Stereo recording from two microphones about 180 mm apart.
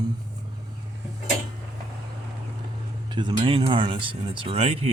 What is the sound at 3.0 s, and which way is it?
Speech, 25° right (ahead or behind).